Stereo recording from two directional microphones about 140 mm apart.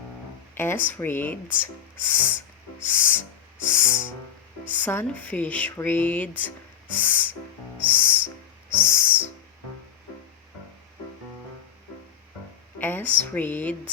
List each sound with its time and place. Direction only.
0.5 s music: 15° left (ahead or behind)
12.8 s music: 15° left (ahead or behind)